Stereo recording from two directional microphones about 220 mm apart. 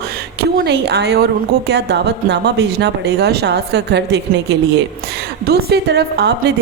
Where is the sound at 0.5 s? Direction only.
50° right (ahead or behind).